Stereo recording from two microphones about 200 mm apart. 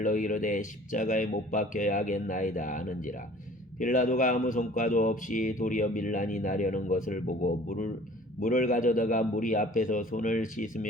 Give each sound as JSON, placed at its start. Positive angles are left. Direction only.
{"t": 0.0, "sound": "speech", "side_deg": 40}